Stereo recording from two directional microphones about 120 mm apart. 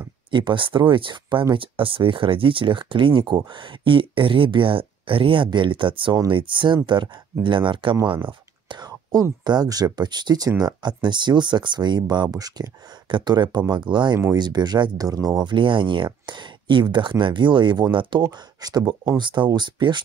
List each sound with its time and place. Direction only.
0.3 s speech: 40° right (ahead or behind)